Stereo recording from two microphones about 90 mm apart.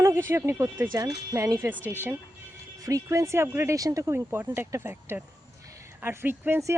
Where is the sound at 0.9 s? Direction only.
50° right (ahead or behind).